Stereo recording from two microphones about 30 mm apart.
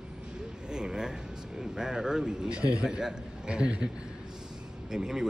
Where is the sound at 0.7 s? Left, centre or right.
Right.